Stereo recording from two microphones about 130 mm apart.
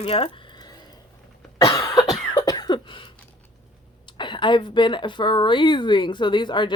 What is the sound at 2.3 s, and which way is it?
Cough, 35° left (ahead or behind).